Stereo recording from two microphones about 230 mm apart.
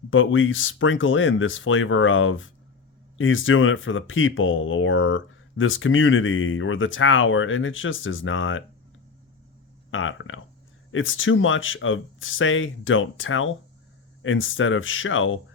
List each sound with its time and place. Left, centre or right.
0.1 s speech: left
9.9 s speech: left